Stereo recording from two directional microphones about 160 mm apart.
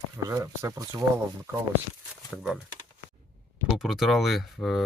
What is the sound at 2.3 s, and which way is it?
Speech, centre (ahead or behind).